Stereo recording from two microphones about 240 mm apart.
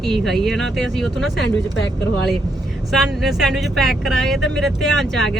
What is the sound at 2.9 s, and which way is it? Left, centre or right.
Speech, centre.